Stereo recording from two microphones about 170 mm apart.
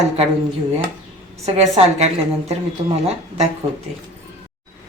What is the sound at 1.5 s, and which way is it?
Speech, 40° right (ahead or behind).